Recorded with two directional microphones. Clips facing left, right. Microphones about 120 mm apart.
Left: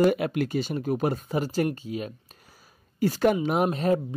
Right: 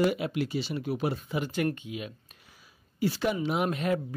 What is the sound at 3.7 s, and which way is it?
Speech, 30° left (ahead or behind).